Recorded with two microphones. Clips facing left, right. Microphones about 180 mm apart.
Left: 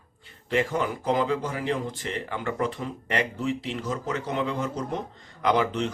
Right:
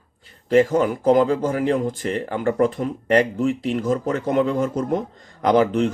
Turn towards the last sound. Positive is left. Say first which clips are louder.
# right 7 dB
turn(degrees=-45)  # may be behind; listen again after turning